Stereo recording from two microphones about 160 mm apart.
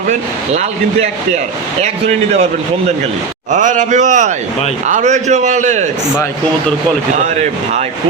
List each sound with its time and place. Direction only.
0.1 s speech: 45° right (ahead or behind)
3.5 s speech: 50° right (ahead or behind)
7.3 s speech: 45° right (ahead or behind)